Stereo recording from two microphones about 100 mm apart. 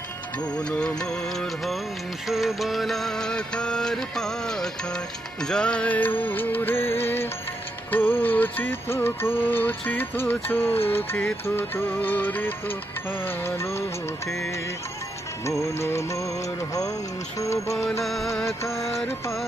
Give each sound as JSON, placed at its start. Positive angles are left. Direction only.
{"t": 0.4, "sound": "music", "side_deg": 10}
{"t": 15.6, "sound": "music", "side_deg": 30}
{"t": 17.4, "sound": "music", "side_deg": 30}
{"t": 18.0, "sound": "music", "side_deg": 0}
{"t": 18.6, "sound": "music", "side_deg": 30}